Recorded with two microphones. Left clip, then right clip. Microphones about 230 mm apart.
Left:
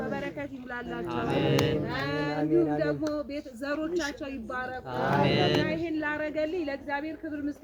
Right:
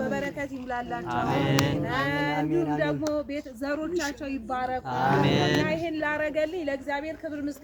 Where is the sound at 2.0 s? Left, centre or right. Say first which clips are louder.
Right 3 dB; right.